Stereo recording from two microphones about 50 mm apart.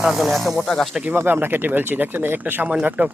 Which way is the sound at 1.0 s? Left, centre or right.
Right.